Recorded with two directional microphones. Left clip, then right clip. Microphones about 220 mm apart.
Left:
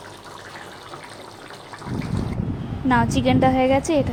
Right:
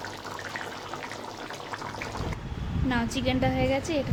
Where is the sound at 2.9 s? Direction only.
25° left (ahead or behind).